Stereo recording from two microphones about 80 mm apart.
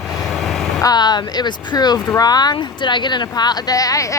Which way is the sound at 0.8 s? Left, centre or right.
Left.